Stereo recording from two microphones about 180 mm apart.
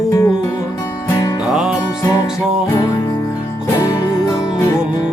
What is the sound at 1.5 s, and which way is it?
Music, 5° right (ahead or behind).